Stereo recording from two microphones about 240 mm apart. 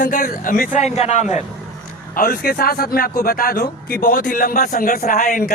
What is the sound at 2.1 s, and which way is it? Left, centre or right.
A man's voice, left.